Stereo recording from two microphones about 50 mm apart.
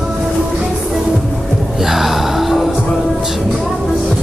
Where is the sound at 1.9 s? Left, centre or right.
Centre.